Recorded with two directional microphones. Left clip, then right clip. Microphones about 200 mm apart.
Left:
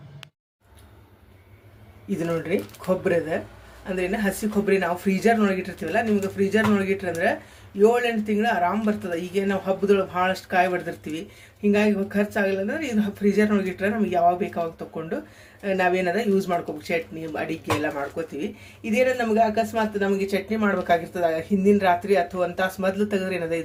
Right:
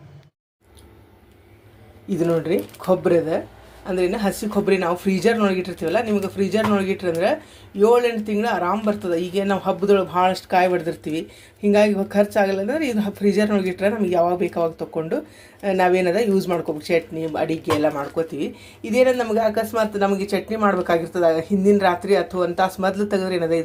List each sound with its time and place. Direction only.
2.0 s speech: 15° right (ahead or behind)